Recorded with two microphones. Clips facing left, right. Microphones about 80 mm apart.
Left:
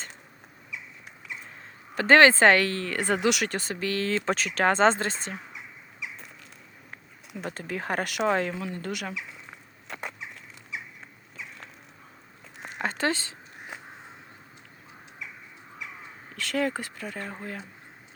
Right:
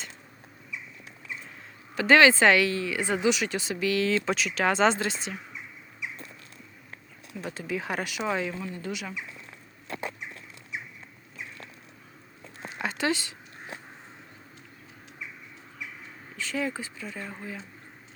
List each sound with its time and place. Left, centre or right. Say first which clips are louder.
2.0 s speech: left 1 dB; left
3.5 s speech: right 2 dB; left
7.4 s speech: even; left
12.8 s a sound: left 1 dB; left
16.3 s speech: left 3 dB; left